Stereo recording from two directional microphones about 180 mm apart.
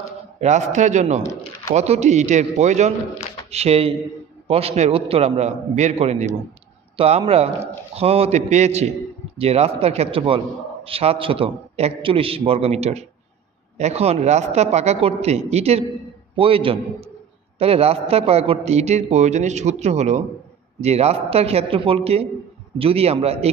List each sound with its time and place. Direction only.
0.4 s a man's voice: 40° right (ahead or behind)